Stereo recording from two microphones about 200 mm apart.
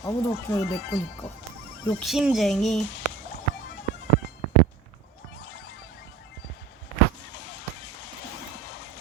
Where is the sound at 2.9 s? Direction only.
65° left (ahead or behind).